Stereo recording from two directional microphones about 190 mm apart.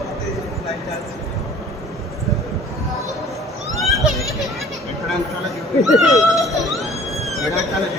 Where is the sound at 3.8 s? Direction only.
Centre (ahead or behind).